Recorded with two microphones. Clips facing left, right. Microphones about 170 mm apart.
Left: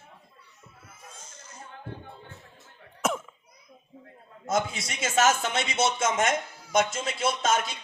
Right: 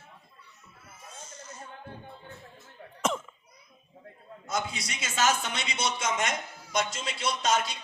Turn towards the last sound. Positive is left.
turn(degrees=50)  # may be behind; listen again after turning